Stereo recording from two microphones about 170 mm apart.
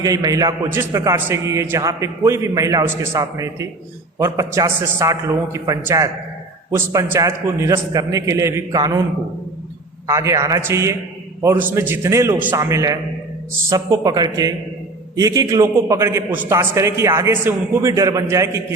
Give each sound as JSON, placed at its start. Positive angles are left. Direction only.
{"t": 0.0, "sound": "a man's voice", "side_deg": -20}
{"t": 10.1, "sound": "a man's voice", "side_deg": -20}